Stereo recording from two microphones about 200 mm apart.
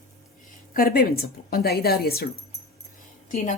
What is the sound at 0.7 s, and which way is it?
A woman's voice, 45° left (ahead or behind).